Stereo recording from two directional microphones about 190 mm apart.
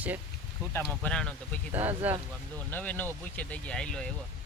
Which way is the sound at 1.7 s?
10° right (ahead or behind).